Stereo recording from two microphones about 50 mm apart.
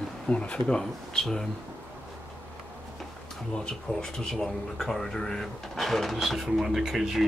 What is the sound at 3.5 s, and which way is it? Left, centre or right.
Speech, centre.